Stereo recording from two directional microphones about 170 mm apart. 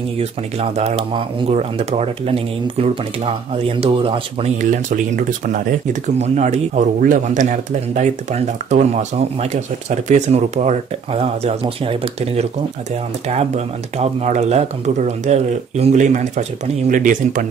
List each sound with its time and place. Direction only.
0.2 s speech: 40° right (ahead or behind)
4.6 s speech: 50° right (ahead or behind)